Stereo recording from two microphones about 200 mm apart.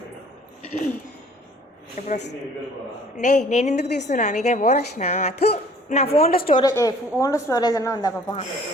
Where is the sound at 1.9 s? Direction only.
35° left (ahead or behind).